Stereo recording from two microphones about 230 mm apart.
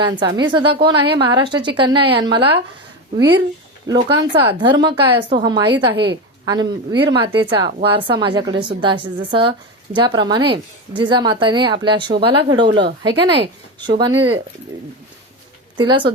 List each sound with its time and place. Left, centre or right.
0.0 s a woman's voice: centre
3.2 s speech: right
3.9 s a woman's voice: centre
15.8 s a woman's voice: right